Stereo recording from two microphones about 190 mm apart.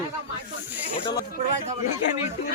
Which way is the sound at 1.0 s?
20° left (ahead or behind).